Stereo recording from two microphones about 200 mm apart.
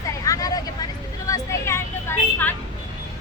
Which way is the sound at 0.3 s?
20° left (ahead or behind).